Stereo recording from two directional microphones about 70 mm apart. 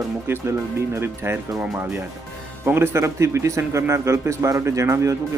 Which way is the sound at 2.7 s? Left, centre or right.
Right.